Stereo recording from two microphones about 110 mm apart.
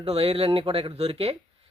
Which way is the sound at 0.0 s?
65° right (ahead or behind).